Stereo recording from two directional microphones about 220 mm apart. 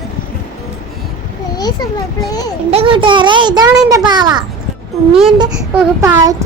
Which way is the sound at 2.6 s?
25° right (ahead or behind).